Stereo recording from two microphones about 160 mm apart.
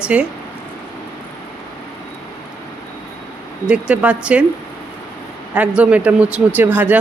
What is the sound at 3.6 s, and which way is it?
Speech, 10° right (ahead or behind).